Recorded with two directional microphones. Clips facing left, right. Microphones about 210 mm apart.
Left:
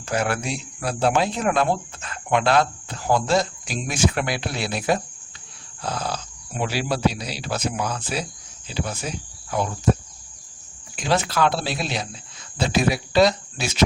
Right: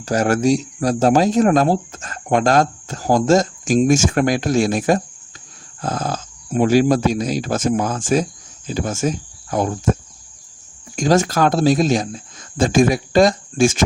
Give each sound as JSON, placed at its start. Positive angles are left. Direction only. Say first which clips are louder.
{"t": 0.0, "sound": "speech", "louder": "right 8 dB", "side_deg": -40}